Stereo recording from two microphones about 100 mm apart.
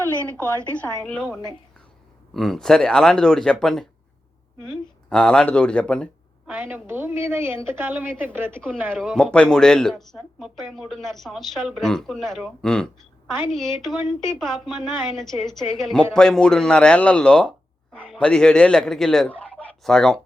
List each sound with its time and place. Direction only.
0.1 s a sound: 25° right (ahead or behind)
0.6 s a woman's voice: 15° left (ahead or behind)
5.0 s speech: 10° left (ahead or behind)
6.5 s a woman's voice: 20° right (ahead or behind)
8.9 s a woman's voice: 5° left (ahead or behind)